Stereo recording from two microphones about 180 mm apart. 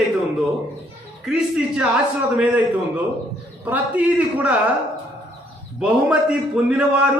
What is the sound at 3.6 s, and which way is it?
Speech, 10° right (ahead or behind).